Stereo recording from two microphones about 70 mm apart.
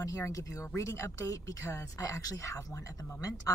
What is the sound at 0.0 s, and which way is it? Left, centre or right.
Speech, left.